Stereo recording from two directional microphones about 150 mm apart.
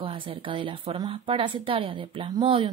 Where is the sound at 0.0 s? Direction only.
35° right (ahead or behind).